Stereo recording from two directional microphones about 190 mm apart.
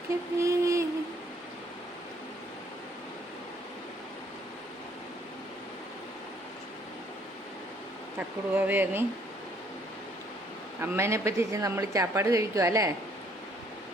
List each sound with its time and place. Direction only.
0.3 s vehicle: 15° right (ahead or behind)
8.5 s a woman's voice: 10° right (ahead or behind)
10.8 s a woman's voice: 10° right (ahead or behind)